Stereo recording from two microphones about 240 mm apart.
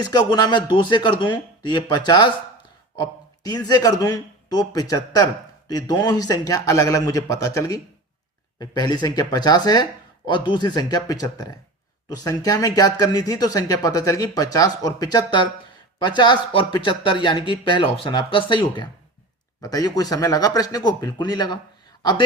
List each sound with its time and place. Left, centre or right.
0.0 s speech: centre